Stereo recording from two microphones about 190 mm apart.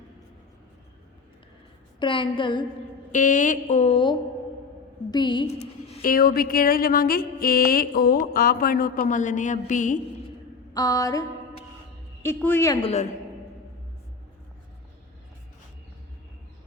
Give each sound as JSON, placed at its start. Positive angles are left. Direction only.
{"t": 2.0, "sound": "a woman's voice", "side_deg": 25}
{"t": 3.1, "sound": "a woman's voice", "side_deg": 40}
{"t": 6.0, "sound": "music", "side_deg": 50}
{"t": 10.8, "sound": "a woman's voice", "side_deg": 20}
{"t": 12.8, "sound": "speech", "side_deg": 35}